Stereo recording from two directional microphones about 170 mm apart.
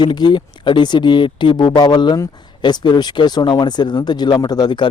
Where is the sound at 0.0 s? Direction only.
25° left (ahead or behind).